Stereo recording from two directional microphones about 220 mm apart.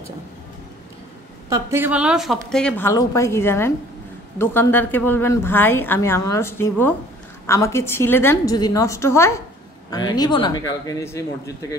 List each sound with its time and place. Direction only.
1.5 s a woman's voice: 10° right (ahead or behind); by 11.5 s 15° left (ahead or behind)